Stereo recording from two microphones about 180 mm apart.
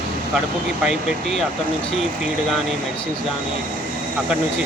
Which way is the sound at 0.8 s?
Centre (ahead or behind).